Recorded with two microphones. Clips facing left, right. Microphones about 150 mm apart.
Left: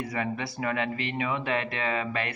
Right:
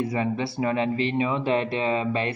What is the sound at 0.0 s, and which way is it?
Speech, 25° right (ahead or behind).